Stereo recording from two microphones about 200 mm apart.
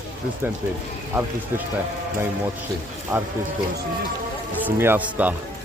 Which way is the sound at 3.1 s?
15° right (ahead or behind).